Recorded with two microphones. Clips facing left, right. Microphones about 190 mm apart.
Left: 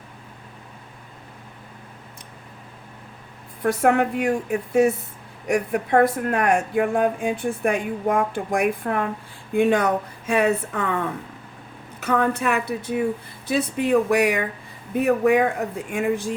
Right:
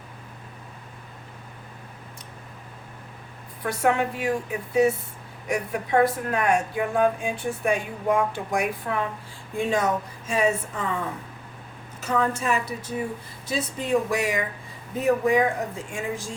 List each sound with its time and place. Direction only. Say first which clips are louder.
3.6 s speech: left 4 dB; 50° left (ahead or behind)